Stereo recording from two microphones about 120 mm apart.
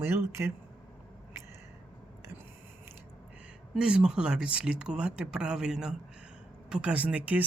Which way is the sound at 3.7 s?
10° right (ahead or behind).